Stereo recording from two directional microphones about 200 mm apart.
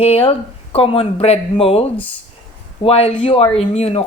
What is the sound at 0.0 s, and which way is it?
A woman's voice, 30° left (ahead or behind).